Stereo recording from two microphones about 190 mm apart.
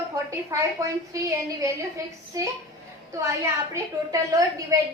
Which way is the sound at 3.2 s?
15° right (ahead or behind).